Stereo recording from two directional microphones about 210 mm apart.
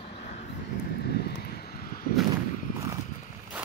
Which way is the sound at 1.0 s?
50° left (ahead or behind).